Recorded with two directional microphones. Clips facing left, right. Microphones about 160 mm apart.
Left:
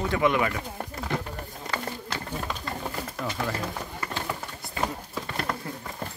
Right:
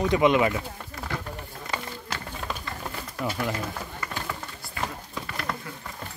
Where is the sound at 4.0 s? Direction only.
25° left (ahead or behind).